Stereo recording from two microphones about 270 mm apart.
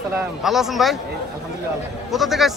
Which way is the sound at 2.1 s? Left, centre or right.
Centre.